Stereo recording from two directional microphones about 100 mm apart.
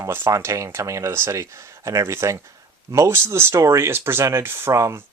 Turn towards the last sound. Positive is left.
turn(degrees=-30)  # may be behind; listen again after turning